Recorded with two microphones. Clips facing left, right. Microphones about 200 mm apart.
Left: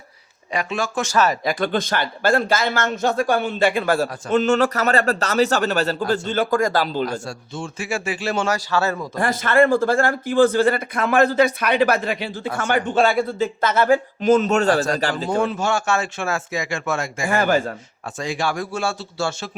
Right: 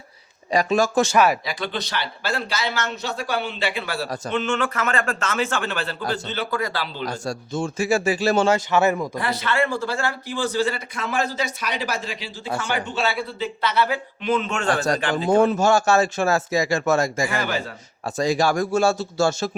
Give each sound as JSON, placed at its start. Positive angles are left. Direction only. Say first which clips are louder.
{"t": 0.5, "sound": "speech", "louder": "right 5 dB", "side_deg": -40}
{"t": 1.1, "sound": "speech", "louder": "left 2 dB", "side_deg": -10}
{"t": 1.5, "sound": "speech", "louder": "left 7 dB", "side_deg": 50}
{"t": 7.0, "sound": "speech", "louder": "left 2 dB", "side_deg": -40}
{"t": 8.4, "sound": "speech", "louder": "right 3 dB", "side_deg": -20}
{"t": 9.1, "sound": "speech", "louder": "left 6 dB", "side_deg": 50}
{"t": 15.3, "sound": "speech", "louder": "right 6 dB", "side_deg": -40}
{"t": 17.2, "sound": "speech", "louder": "left 6 dB", "side_deg": 45}
{"t": 18.0, "sound": "speech", "louder": "right 4 dB", "side_deg": -40}